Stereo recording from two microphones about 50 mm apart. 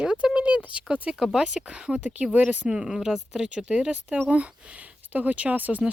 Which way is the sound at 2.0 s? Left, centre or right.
Right.